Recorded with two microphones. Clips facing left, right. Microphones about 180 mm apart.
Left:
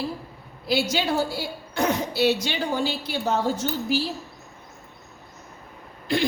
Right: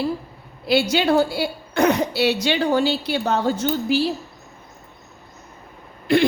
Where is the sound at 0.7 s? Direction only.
65° right (ahead or behind).